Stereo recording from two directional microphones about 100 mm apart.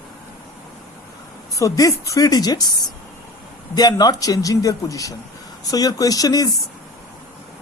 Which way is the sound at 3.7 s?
40° left (ahead or behind).